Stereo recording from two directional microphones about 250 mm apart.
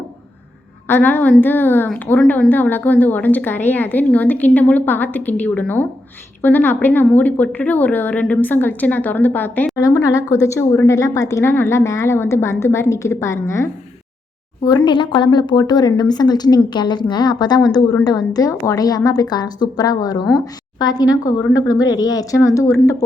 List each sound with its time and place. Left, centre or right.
0.9 s a woman's voice: centre